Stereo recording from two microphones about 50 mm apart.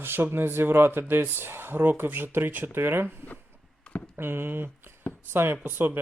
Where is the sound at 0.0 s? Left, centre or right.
Right.